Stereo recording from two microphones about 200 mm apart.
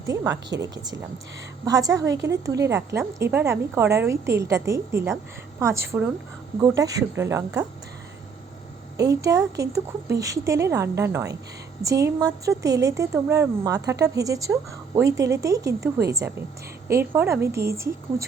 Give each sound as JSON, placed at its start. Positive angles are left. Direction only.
{"t": 0.6, "sound": "a woman's voice", "side_deg": -20}
{"t": 9.0, "sound": "a woman's voice", "side_deg": -15}